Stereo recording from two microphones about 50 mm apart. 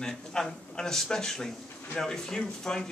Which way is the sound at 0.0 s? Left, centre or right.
Centre.